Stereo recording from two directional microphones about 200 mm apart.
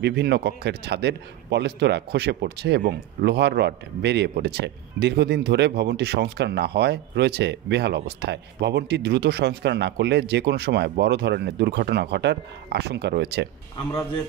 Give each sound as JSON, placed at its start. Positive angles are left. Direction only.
{"t": 0.0, "sound": "a man's voice", "side_deg": -55}